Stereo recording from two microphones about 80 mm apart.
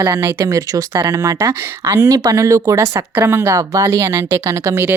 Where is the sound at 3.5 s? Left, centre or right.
Right.